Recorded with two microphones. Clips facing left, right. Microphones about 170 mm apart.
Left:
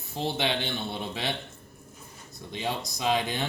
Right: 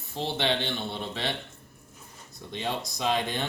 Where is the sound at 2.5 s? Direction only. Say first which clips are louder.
Even; 5° left (ahead or behind).